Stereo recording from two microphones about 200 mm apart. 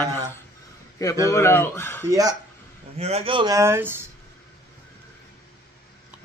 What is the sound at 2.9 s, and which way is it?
Speech, 30° right (ahead or behind).